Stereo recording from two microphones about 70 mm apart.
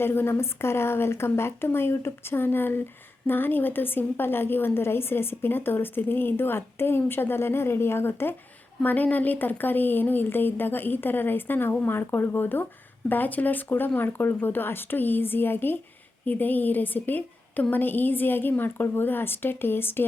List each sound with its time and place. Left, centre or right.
0.0 s a woman's voice: left